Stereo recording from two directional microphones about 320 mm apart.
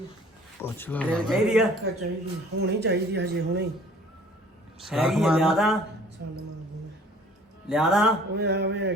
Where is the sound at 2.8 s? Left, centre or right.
Right.